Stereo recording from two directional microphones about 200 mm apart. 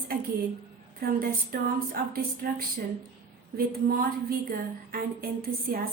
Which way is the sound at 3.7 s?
50° right (ahead or behind).